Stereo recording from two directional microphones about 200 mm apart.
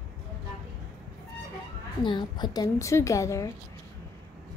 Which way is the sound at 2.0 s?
20° left (ahead or behind).